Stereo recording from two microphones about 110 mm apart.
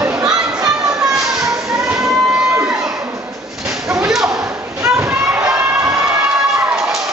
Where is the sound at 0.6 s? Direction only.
30° right (ahead or behind).